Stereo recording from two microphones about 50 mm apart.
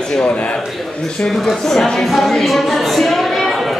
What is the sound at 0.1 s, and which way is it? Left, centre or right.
Speech, left.